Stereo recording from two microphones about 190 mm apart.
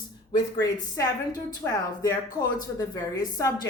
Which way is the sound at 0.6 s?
20° left (ahead or behind).